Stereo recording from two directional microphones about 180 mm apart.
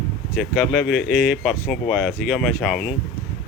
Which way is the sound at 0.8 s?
70° left (ahead or behind).